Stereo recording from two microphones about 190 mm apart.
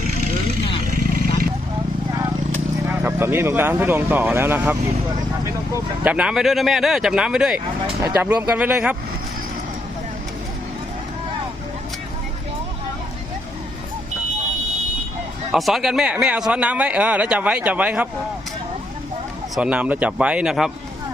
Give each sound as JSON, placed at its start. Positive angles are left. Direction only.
{"t": 0.9, "sound": "a sound", "side_deg": -50}
{"t": 2.8, "sound": "speech", "side_deg": -10}
{"t": 6.1, "sound": "a man's voice", "side_deg": -5}
{"t": 15.5, "sound": "speech", "side_deg": 0}
{"t": 19.5, "sound": "a man's voice", "side_deg": -5}